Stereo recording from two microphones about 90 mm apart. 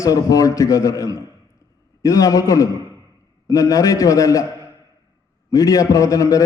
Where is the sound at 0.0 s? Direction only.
40° left (ahead or behind).